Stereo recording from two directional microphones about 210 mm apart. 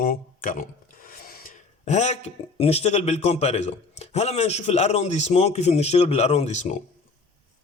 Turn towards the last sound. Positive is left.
turn(degrees=35)  # may be behind; listen again after turning